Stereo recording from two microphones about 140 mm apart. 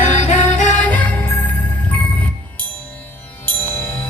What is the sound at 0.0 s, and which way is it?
Music, 55° left (ahead or behind).